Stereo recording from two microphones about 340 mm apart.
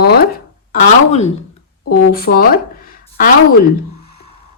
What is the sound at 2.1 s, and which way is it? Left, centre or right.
Speech, left.